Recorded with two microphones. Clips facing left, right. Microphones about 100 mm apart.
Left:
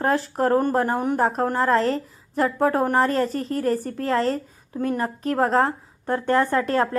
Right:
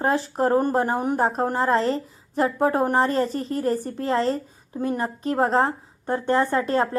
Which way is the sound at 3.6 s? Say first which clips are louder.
Left 1 dB; 25° right (ahead or behind).